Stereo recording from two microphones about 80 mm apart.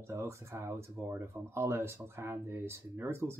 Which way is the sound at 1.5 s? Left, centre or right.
Right.